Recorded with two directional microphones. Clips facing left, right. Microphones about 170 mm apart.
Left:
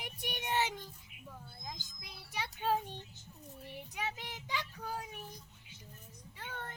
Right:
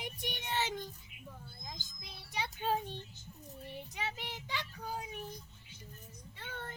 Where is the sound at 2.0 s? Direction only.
5° left (ahead or behind).